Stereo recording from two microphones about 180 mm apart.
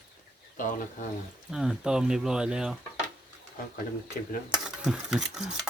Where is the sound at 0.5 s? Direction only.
45° left (ahead or behind).